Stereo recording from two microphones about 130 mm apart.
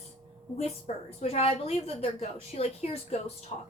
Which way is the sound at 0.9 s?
55° left (ahead or behind).